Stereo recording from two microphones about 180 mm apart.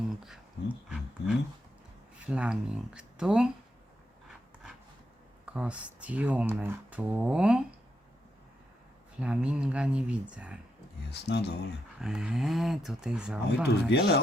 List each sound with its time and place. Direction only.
0.3 s speech: 5° right (ahead or behind)
5.5 s speech: 5° right (ahead or behind)
9.2 s speech: 5° right (ahead or behind)
11.1 s speech: 70° left (ahead or behind)
11.9 s speech: 5° right (ahead or behind)
13.9 s speech: 65° left (ahead or behind)